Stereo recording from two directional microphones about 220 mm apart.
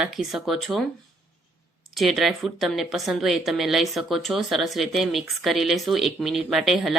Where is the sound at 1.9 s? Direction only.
Centre (ahead or behind).